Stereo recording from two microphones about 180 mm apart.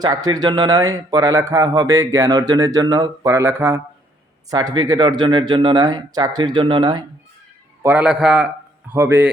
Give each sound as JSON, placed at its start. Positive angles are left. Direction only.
{"t": 0.0, "sound": "speech", "side_deg": -20}
{"t": 7.8, "sound": "a man's voice", "side_deg": -10}